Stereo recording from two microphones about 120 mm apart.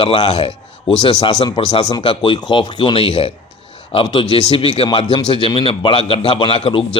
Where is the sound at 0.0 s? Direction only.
50° left (ahead or behind).